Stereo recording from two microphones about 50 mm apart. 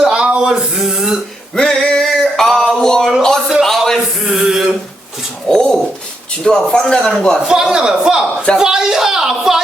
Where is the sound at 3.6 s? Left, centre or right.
Centre.